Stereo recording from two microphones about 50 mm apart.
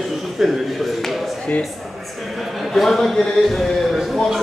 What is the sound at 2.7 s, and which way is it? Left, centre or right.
A man's voice, centre.